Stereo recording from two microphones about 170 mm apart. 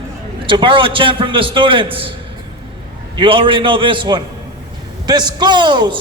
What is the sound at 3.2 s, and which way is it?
A man's voice, 30° right (ahead or behind).